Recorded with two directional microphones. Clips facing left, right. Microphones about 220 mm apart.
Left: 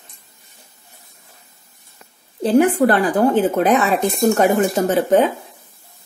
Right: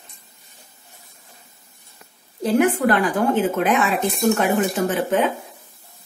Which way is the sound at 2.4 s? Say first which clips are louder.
Left 4 dB; 30° left (ahead or behind).